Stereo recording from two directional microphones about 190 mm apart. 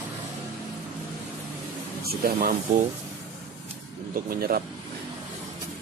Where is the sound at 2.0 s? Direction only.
55° right (ahead or behind).